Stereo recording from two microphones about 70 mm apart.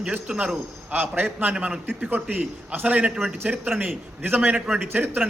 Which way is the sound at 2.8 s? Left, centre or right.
Centre.